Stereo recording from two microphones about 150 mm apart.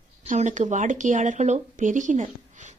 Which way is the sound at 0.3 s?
55° right (ahead or behind).